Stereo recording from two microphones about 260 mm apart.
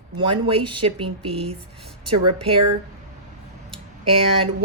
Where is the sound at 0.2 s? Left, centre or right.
Centre.